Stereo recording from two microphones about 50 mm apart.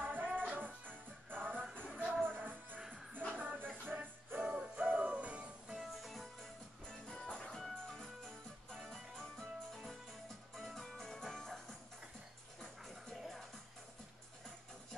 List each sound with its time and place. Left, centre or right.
0.0 s music: right
3.1 s music: left
3.3 s music: right
5.7 s music: centre
6.9 s music: centre
12.8 s music: centre